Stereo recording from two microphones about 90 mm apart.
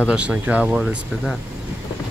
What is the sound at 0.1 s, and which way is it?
Speech, 10° right (ahead or behind).